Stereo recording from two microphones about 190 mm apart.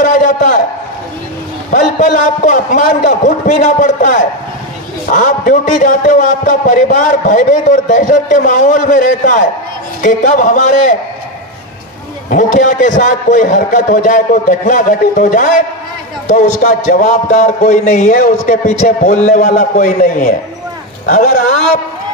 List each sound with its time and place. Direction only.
0.0 s a sound: 45° left (ahead or behind)
1.7 s a man's voice: 45° left (ahead or behind)
12.3 s a man's voice: 45° left (ahead or behind)